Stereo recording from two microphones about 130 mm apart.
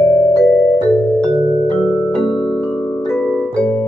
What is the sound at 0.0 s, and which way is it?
Music, 20° left (ahead or behind).